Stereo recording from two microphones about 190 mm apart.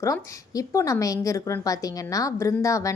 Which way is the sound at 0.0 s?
15° left (ahead or behind).